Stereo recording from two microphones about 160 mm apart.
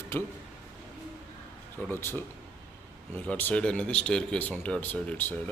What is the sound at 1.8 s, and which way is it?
Speech, 15° left (ahead or behind).